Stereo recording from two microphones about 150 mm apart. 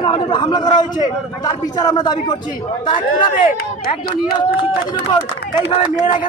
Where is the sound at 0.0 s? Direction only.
35° left (ahead or behind).